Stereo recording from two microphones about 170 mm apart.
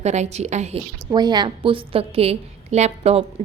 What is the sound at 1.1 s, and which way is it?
A woman's voice, 25° right (ahead or behind).